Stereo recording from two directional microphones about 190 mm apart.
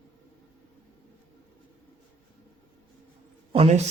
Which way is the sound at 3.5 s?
30° right (ahead or behind).